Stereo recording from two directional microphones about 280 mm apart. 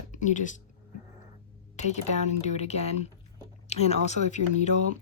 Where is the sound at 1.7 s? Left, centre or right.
Left.